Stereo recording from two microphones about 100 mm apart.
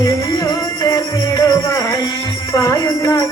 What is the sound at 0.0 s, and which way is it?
Music, 30° left (ahead or behind).